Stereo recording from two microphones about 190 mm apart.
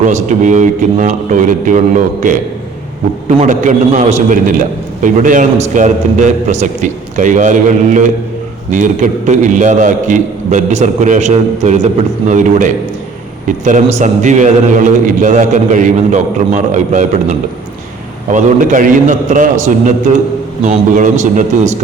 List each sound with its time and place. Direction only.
0.0 s a man's voice: 40° right (ahead or behind)
20.7 s a man's voice: 40° right (ahead or behind)